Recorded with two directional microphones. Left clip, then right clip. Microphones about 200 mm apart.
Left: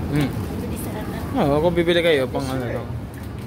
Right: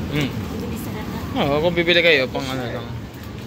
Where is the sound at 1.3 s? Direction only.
20° left (ahead or behind).